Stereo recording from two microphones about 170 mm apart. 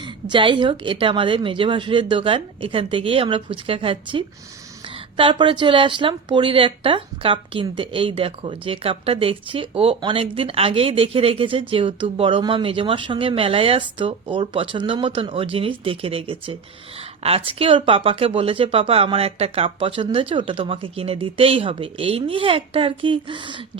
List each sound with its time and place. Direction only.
0.3 s a woman's voice: 30° right (ahead or behind)